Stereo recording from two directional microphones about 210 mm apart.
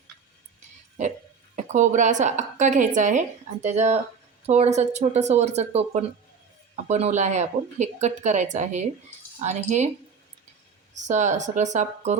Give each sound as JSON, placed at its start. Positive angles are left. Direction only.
{"t": 1.5, "sound": "a woman's voice", "side_deg": -35}
{"t": 11.0, "sound": "a woman's voice", "side_deg": -35}